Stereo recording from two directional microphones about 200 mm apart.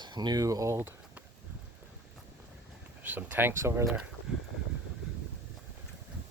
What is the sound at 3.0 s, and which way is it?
Speech, 10° right (ahead or behind).